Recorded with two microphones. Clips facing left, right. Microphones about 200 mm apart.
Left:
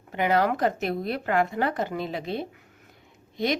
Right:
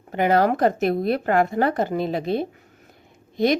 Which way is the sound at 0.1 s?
45° right (ahead or behind).